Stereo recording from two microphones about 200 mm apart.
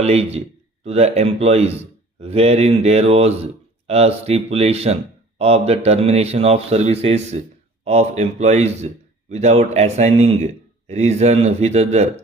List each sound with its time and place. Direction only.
0.0 s speech: 30° right (ahead or behind)